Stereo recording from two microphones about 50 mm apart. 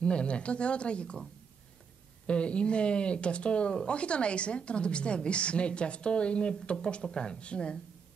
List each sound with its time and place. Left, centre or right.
0.0 s speech: left
2.2 s speech: left